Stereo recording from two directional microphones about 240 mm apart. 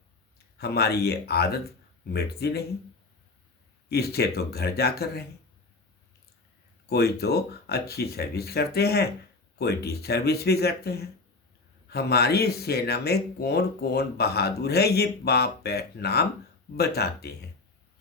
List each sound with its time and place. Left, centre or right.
0.6 s speech: left
3.8 s speech: left
6.8 s speech: left